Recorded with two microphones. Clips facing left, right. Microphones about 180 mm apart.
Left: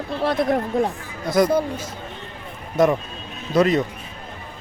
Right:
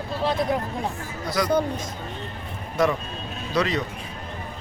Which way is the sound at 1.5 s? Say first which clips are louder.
Left 2 dB; 10° left (ahead or behind).